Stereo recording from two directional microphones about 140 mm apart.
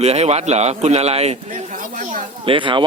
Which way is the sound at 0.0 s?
50° right (ahead or behind).